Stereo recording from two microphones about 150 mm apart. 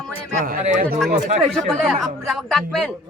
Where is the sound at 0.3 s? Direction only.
70° right (ahead or behind).